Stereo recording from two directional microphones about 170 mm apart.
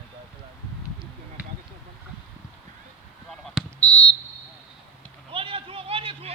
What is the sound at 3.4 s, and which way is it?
Fire alarm, 5° left (ahead or behind).